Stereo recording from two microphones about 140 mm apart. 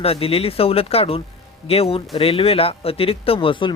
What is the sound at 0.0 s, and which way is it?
Speech, 45° left (ahead or behind).